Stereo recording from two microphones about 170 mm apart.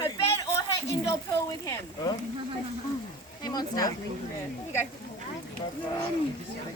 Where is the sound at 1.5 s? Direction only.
25° left (ahead or behind).